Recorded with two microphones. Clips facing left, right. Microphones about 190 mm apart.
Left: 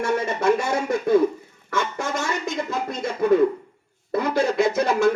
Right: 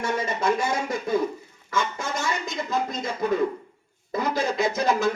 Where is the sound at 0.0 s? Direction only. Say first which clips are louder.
Left 4 dB; 70° left (ahead or behind).